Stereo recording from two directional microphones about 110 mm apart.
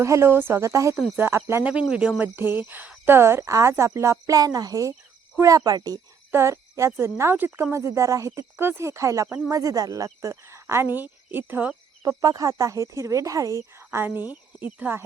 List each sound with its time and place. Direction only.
0.0 s speech: 25° right (ahead or behind)
1.6 s speech: 10° right (ahead or behind)
12.0 s speech: 35° right (ahead or behind)